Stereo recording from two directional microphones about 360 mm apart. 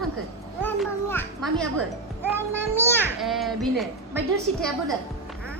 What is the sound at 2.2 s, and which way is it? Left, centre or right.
A child's voice, centre.